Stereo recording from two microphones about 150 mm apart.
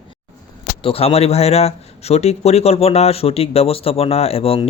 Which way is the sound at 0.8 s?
40° left (ahead or behind).